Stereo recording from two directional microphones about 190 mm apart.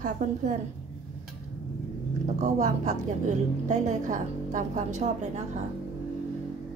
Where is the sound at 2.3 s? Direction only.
40° right (ahead or behind).